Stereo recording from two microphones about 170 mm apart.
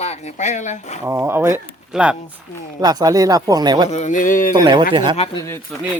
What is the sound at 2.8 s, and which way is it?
Speech, 25° right (ahead or behind).